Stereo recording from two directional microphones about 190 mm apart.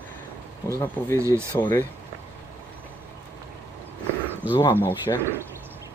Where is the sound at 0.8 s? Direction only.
15° left (ahead or behind).